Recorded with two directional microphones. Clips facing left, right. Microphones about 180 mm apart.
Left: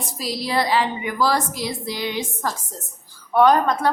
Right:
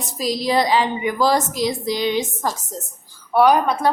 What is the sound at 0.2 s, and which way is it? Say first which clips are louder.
A woman's voice: right 4 dB; 20° right (ahead or behind).